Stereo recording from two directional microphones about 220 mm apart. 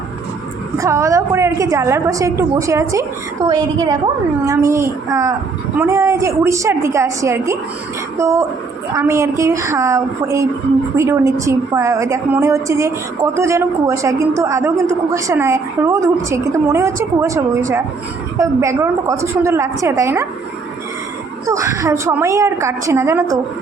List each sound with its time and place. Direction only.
0.8 s a woman's voice: 15° right (ahead or behind)
21.4 s a woman's voice: 15° right (ahead or behind)